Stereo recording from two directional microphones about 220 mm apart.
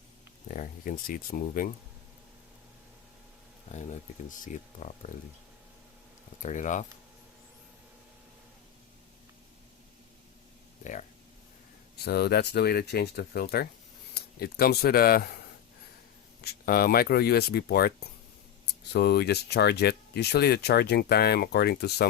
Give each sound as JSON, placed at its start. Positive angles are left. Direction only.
{"t": 0.4, "sound": "speech", "side_deg": 40}
{"t": 4.4, "sound": "speech", "side_deg": 35}
{"t": 6.4, "sound": "speech", "side_deg": 35}
{"t": 12.0, "sound": "speech", "side_deg": 45}
{"t": 16.4, "sound": "speech", "side_deg": 45}